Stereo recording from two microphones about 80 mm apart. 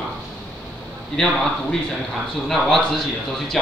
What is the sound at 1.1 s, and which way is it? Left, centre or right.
A man's voice, centre.